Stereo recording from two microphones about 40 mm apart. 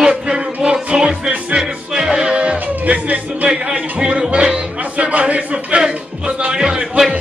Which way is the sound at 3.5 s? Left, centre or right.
Right.